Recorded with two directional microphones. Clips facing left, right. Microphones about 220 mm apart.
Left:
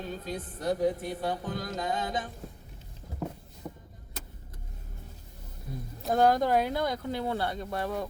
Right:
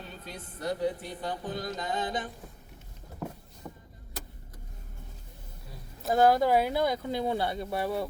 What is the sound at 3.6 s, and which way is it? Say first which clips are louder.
Vehicle: left 3 dB; 15° left (ahead or behind).